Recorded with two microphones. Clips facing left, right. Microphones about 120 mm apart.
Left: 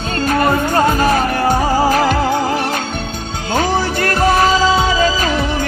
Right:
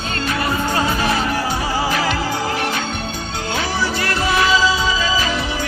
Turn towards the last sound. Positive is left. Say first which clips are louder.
# left 5 dB
turn(degrees=55)  # may be behind; listen again after turning